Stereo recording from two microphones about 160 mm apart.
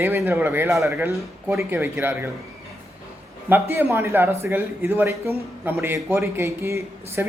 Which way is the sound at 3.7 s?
15° right (ahead or behind).